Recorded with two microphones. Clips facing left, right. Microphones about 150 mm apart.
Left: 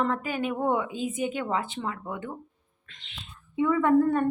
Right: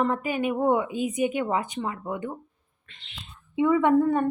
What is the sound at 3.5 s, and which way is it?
Speech, 20° right (ahead or behind).